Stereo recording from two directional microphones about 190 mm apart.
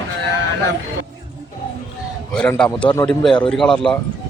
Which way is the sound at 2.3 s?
5° left (ahead or behind).